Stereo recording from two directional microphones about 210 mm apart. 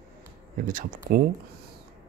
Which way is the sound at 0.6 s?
40° right (ahead or behind).